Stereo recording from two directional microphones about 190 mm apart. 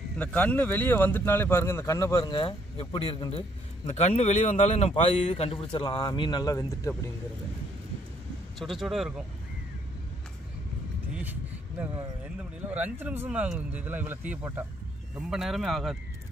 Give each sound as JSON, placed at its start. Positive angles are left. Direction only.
{"t": 0.2, "sound": "speech", "side_deg": 10}
{"t": 8.5, "sound": "speech", "side_deg": 0}
{"t": 12.7, "sound": "speech", "side_deg": -10}